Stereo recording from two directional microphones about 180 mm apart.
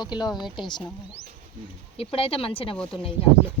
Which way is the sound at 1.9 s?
30° left (ahead or behind).